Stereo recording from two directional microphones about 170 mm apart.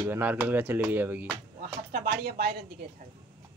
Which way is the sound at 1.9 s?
60° right (ahead or behind).